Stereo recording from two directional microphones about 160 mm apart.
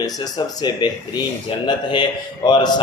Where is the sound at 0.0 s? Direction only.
25° left (ahead or behind).